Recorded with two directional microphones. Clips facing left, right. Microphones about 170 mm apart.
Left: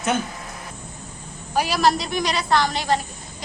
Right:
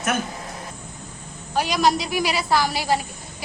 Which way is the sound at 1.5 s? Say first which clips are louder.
Even; 5° left (ahead or behind).